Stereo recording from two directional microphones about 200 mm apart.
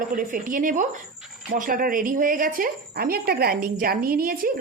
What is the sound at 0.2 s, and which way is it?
A woman's voice, 45° right (ahead or behind).